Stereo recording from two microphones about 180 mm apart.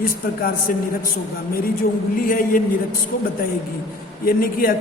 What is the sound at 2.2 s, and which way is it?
Speech, 50° left (ahead or behind).